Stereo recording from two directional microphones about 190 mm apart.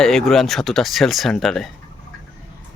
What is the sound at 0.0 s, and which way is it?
Speech, centre (ahead or behind).